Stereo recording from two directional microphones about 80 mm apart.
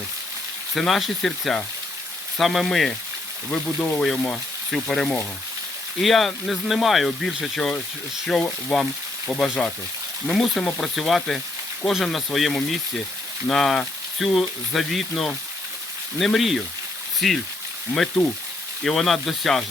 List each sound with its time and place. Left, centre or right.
0.8 s speech: centre
3.5 s speech: centre
18.2 s speech: left
18.8 s speech: centre